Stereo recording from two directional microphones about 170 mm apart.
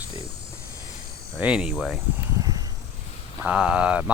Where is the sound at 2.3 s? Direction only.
20° right (ahead or behind).